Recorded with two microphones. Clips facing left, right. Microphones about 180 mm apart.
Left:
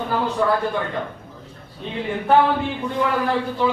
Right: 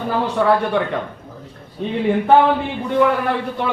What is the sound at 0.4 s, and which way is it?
Speech, 75° right (ahead or behind).